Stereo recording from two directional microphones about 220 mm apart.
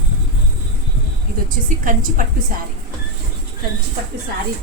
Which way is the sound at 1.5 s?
40° right (ahead or behind).